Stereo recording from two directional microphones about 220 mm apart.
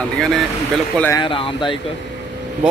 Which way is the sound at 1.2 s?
20° left (ahead or behind).